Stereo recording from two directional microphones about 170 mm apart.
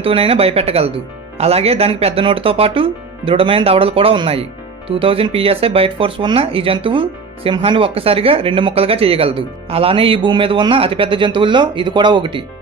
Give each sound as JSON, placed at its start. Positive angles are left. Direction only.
{"t": 0.0, "sound": "speech", "side_deg": -35}